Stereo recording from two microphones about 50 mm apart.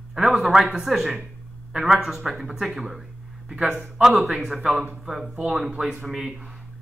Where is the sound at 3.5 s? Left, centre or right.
Right.